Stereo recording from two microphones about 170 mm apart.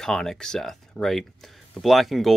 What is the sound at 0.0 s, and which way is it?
Speech, 5° left (ahead or behind).